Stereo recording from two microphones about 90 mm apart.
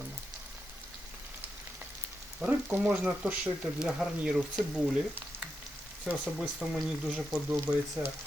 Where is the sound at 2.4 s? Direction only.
10° right (ahead or behind).